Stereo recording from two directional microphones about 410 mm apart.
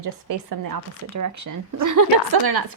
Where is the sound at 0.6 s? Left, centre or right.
Right.